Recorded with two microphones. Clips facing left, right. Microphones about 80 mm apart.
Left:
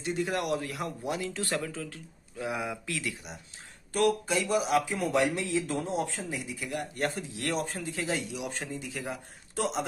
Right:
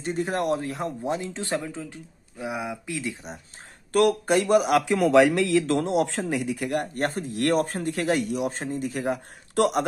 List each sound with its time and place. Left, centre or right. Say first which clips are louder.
0.0 s speech: right 4 dB; right
3.9 s speech: right 6 dB; right